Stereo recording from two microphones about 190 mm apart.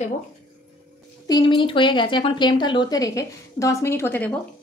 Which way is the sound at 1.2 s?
25° left (ahead or behind).